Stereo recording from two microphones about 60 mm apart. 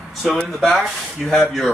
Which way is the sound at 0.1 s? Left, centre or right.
Centre.